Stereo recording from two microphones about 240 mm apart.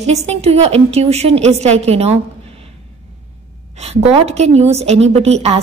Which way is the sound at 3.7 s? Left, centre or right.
Right.